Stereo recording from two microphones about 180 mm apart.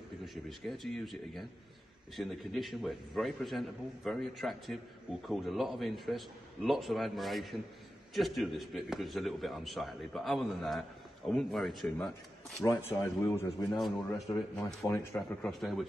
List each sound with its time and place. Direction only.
0.2 s a man's voice: centre (ahead or behind)
12.6 s a man's voice: 15° left (ahead or behind)
15.1 s a man's voice: centre (ahead or behind)